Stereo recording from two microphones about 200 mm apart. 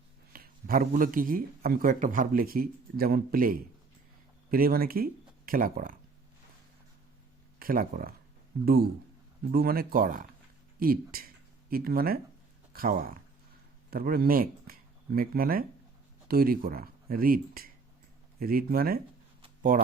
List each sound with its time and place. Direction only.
0.3 s speech: 45° right (ahead or behind)
7.6 s speech: 45° right (ahead or behind)